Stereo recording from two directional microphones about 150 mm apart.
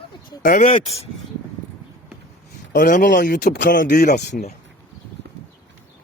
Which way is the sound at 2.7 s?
60° left (ahead or behind).